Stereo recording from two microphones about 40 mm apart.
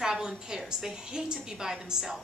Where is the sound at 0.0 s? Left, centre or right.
Centre.